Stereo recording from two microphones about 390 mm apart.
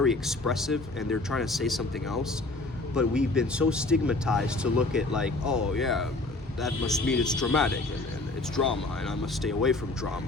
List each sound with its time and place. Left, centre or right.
0.0 s speech: centre